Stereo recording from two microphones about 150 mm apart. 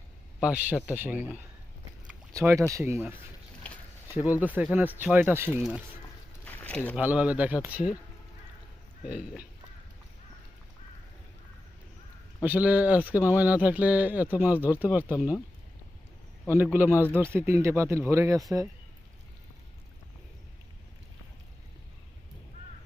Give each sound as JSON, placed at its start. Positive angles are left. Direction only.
{"t": 0.3, "sound": "speech", "side_deg": -10}
{"t": 4.2, "sound": "speech", "side_deg": -10}
{"t": 6.4, "sound": "a sound", "side_deg": 10}
{"t": 6.9, "sound": "speech", "side_deg": -10}
{"t": 9.0, "sound": "speech", "side_deg": -10}
{"t": 12.4, "sound": "speech", "side_deg": -10}
{"t": 16.7, "sound": "speech", "side_deg": -15}